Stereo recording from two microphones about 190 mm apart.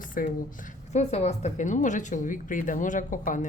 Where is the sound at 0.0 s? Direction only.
45° left (ahead or behind).